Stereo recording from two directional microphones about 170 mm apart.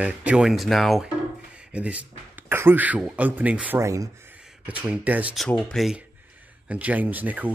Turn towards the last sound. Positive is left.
turn(degrees=-10)  # may be behind; listen again after turning